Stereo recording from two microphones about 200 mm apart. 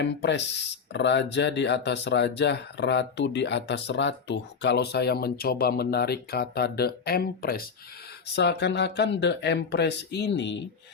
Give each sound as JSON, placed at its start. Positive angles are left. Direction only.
{"t": 0.0, "sound": "speech", "side_deg": 60}
{"t": 8.4, "sound": "speech", "side_deg": 60}